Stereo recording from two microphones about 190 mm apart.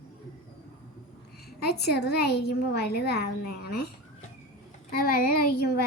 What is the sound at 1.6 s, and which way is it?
Speech, 60° left (ahead or behind).